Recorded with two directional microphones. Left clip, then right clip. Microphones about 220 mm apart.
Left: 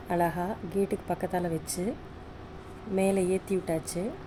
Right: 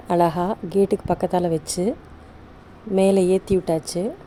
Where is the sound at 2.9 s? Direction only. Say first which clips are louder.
Right 9 dB; 35° right (ahead or behind).